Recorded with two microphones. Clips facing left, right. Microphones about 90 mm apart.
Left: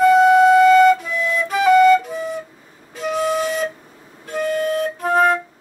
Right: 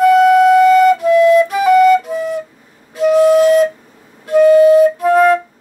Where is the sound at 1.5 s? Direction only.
5° right (ahead or behind).